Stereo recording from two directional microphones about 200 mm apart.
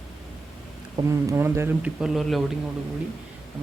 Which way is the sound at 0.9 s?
15° right (ahead or behind).